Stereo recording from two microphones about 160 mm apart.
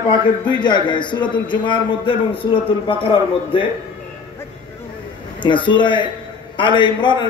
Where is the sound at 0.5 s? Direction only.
30° left (ahead or behind).